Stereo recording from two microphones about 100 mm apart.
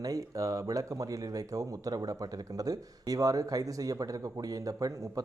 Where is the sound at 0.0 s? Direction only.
35° right (ahead or behind).